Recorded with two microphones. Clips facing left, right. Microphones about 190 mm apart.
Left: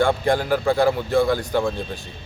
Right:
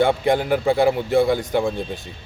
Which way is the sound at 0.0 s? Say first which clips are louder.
Right 1 dB; 20° right (ahead or behind).